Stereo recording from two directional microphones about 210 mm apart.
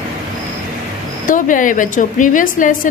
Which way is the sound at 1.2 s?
40° left (ahead or behind).